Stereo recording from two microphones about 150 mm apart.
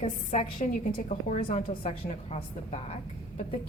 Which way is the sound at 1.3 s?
45° left (ahead or behind).